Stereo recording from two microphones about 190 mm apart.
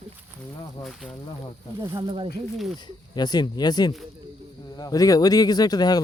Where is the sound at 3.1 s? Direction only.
20° left (ahead or behind).